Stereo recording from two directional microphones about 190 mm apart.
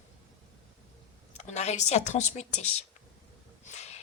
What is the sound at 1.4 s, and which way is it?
Speech, 35° left (ahead or behind).